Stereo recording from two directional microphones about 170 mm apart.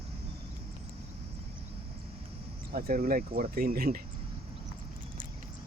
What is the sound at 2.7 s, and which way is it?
Speech, 60° right (ahead or behind).